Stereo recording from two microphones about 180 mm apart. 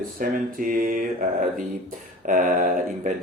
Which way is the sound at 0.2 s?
50° right (ahead or behind).